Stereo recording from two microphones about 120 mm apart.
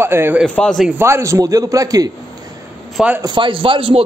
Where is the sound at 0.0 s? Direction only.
20° right (ahead or behind).